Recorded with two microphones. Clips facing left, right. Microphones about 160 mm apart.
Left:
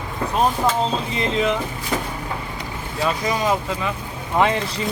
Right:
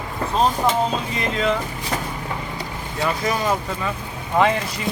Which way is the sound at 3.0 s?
15° left (ahead or behind).